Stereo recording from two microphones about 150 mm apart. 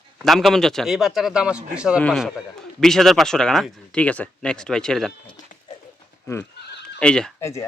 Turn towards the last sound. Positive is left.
turn(degrees=20)  # may be behind; listen again after turning